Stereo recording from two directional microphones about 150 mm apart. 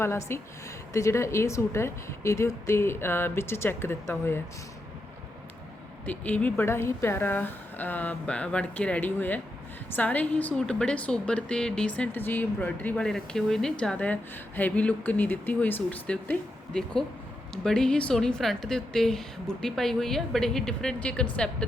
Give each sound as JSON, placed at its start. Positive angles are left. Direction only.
{"t": 0.0, "sound": "a woman's voice", "side_deg": 15}
{"t": 6.1, "sound": "a woman's voice", "side_deg": 10}